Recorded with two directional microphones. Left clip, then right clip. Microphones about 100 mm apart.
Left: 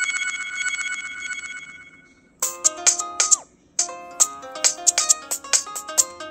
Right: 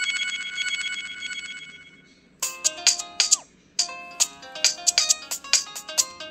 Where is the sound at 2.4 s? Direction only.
55° left (ahead or behind).